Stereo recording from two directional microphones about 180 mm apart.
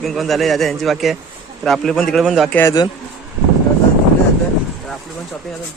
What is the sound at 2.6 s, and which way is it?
Speech, 20° left (ahead or behind).